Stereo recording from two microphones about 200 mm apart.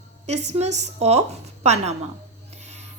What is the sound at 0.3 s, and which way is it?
A woman's voice, 35° right (ahead or behind).